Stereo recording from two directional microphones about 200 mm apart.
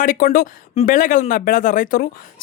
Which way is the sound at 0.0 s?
45° left (ahead or behind).